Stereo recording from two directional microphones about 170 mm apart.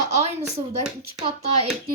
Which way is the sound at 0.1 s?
40° right (ahead or behind).